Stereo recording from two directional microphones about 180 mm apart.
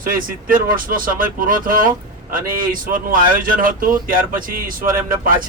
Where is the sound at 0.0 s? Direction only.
50° right (ahead or behind).